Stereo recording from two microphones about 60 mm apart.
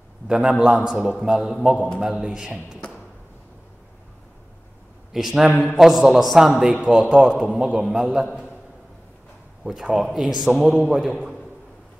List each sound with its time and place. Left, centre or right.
0.3 s a man's voice: centre
5.1 s a man's voice: centre
6.8 s speech: centre
7.5 s a man's voice: centre
9.6 s a man's voice: centre